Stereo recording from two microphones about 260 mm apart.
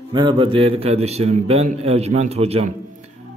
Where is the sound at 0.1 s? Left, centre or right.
Centre.